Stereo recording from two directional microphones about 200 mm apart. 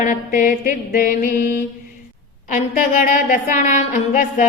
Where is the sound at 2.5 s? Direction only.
40° left (ahead or behind).